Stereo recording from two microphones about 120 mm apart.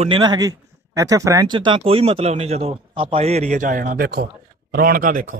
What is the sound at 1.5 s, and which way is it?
A man's voice, 40° right (ahead or behind).